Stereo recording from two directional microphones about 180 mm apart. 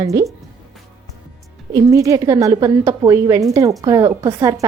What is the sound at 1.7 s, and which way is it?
A woman's voice, 20° right (ahead or behind).